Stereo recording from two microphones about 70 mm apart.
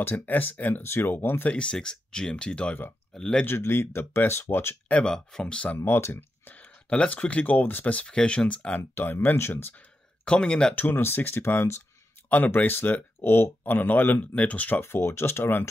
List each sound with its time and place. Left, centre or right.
0.0 s speech: left
1.5 s speech: centre
3.4 s speech: left
4.8 s speech: centre
5.8 s speech: left
6.5 s speech: centre
8.9 s speech: left
10.2 s speech: centre
10.7 s speech: left
14.8 s speech: left